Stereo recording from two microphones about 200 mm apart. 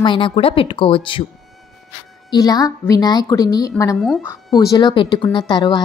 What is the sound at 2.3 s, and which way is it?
A woman's voice, 20° left (ahead or behind).